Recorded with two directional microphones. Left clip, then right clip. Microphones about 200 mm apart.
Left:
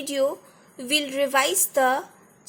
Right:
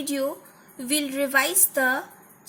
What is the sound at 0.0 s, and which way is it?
A woman's voice, 30° left (ahead or behind).